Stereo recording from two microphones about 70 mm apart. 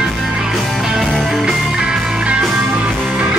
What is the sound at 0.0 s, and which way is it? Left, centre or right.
Music, centre.